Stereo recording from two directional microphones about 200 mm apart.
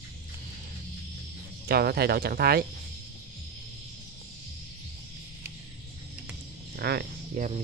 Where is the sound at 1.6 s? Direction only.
50° right (ahead or behind).